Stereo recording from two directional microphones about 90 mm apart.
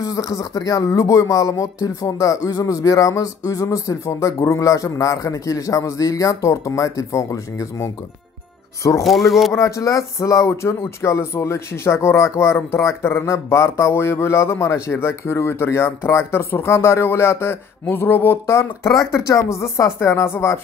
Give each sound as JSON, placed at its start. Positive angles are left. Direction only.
{"t": 0.0, "sound": "speech", "side_deg": 40}
{"t": 9.0, "sound": "speech", "side_deg": 0}
{"t": 9.5, "sound": "speech", "side_deg": 35}